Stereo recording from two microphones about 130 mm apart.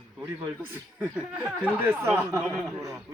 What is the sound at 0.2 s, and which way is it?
A man's voice, 15° right (ahead or behind).